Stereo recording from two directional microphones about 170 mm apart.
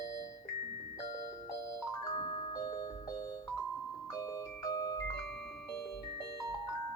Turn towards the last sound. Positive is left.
turn(degrees=20)  # may be behind; listen again after turning